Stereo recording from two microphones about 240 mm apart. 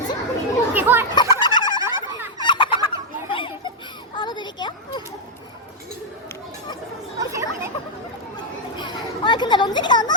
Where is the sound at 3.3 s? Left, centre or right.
Left.